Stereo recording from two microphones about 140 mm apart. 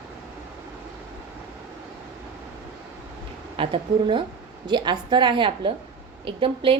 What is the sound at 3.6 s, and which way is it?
A woman's voice, 40° right (ahead or behind).